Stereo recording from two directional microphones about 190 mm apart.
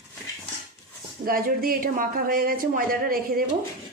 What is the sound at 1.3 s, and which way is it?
Speech, 50° right (ahead or behind).